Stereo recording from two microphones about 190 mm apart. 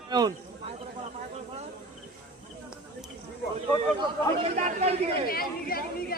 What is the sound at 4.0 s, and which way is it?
Chatter, 35° right (ahead or behind).